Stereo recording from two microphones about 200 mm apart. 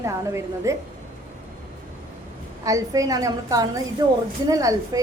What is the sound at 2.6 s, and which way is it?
A woman's voice, 15° right (ahead or behind).